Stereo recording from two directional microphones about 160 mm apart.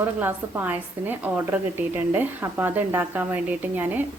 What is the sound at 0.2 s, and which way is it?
Speech, 10° right (ahead or behind).